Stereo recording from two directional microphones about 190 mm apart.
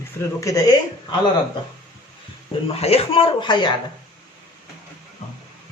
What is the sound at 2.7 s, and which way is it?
Speech, 30° left (ahead or behind).